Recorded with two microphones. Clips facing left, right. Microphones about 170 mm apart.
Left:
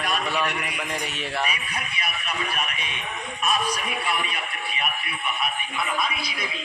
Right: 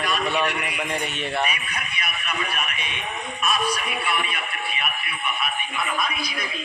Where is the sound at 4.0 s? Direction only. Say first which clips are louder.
Right 1 dB; 35° left (ahead or behind).